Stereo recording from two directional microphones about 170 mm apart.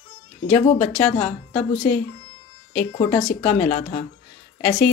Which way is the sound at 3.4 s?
40° left (ahead or behind).